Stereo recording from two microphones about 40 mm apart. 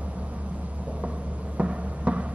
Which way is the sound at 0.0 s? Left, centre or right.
Right.